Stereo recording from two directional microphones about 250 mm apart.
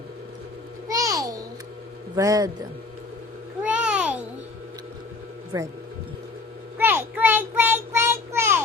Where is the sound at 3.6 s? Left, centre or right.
Centre.